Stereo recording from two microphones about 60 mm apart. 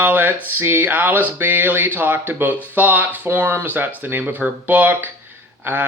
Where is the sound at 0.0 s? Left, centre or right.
Right.